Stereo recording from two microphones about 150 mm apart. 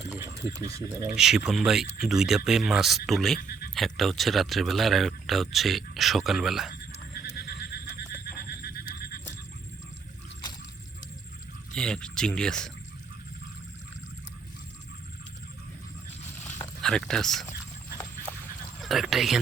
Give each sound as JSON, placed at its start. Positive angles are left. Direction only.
{"t": 0.1, "sound": "speech", "side_deg": -20}
{"t": 1.1, "sound": "speech", "side_deg": -5}
{"t": 7.1, "sound": "neigh", "side_deg": 90}
{"t": 8.4, "sound": "music", "side_deg": 90}
{"t": 11.7, "sound": "speech", "side_deg": 5}
{"t": 16.8, "sound": "speech", "side_deg": 5}
{"t": 18.8, "sound": "speech", "side_deg": 0}